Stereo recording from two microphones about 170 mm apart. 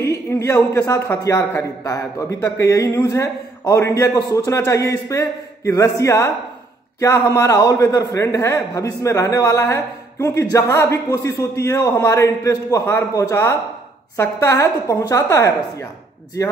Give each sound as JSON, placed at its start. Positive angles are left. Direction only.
{"t": 0.0, "sound": "a man's voice", "side_deg": 15}